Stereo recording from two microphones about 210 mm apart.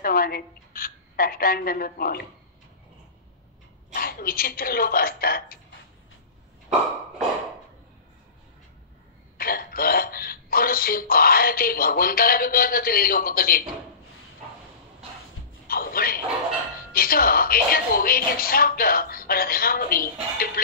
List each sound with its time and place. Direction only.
0.0 s a woman's voice: 45° left (ahead or behind)
3.9 s speech: 45° left (ahead or behind)
9.4 s speech: 45° left (ahead or behind)
15.7 s a sound: 45° left (ahead or behind)
16.9 s speech: 45° left (ahead or behind)